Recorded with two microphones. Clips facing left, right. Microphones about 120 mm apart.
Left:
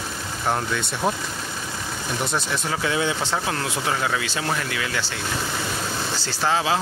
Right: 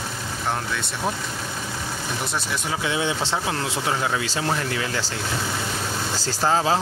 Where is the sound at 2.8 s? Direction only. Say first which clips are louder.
Left 1 dB; 20° right (ahead or behind).